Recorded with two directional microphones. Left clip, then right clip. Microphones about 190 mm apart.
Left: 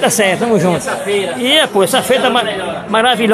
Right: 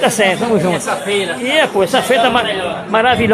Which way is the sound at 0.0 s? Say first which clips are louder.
Left 1 dB; 15° left (ahead or behind).